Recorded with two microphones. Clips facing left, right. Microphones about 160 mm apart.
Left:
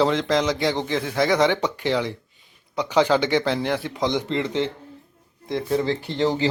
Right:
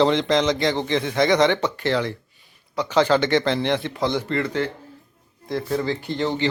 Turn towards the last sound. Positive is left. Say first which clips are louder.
# left 2 dB
turn(degrees=30)  # may be behind; listen again after turning